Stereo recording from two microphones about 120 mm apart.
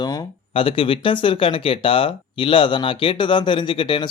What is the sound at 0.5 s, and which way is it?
Speech, 50° left (ahead or behind).